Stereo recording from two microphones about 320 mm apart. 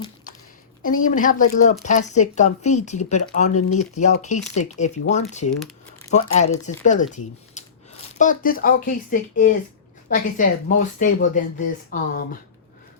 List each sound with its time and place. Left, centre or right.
0.9 s speech: left